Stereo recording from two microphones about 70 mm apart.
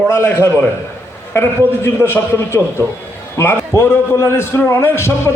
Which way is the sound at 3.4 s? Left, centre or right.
Left.